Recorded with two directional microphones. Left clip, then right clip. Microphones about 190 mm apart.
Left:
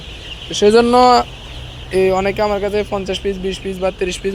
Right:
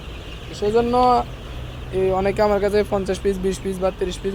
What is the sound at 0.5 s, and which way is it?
Speech, 90° left.